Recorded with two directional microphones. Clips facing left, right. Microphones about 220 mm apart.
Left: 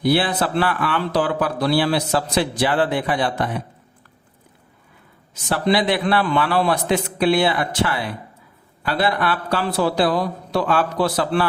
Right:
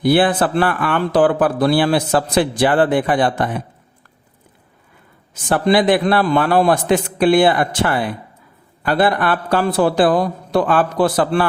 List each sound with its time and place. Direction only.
0.0 s speech: 50° right (ahead or behind)
5.3 s speech: 50° right (ahead or behind)